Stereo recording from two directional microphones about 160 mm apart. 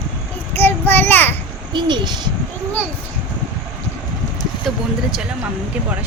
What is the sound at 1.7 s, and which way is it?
Speech, 30° right (ahead or behind).